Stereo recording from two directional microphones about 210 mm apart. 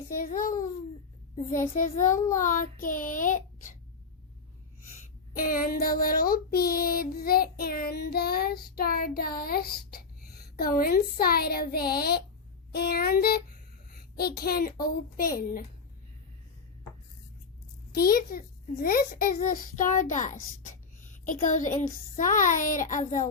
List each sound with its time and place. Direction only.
0.2 s a child's voice: 40° left (ahead or behind)
5.4 s child singing: 40° left (ahead or behind)
17.9 s a child's voice: 45° left (ahead or behind)
21.4 s a child's voice: 40° left (ahead or behind)